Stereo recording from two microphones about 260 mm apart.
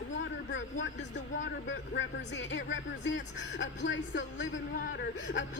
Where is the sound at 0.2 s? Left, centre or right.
Left.